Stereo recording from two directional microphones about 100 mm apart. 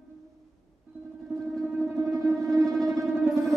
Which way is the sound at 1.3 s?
Centre (ahead or behind).